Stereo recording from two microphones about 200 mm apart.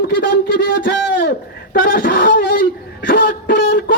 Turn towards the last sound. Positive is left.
turn(degrees=50)  # may be behind; listen again after turning